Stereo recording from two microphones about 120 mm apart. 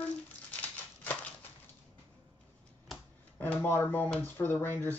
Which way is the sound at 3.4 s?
15° left (ahead or behind).